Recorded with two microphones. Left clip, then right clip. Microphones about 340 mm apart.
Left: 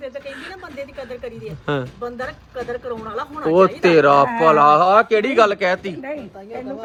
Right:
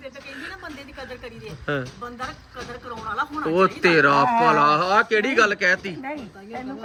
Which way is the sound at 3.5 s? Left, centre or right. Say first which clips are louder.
Left 5 dB; centre.